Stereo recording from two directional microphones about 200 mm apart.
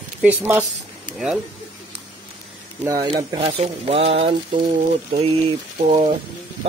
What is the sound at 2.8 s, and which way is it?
Speech, 20° right (ahead or behind).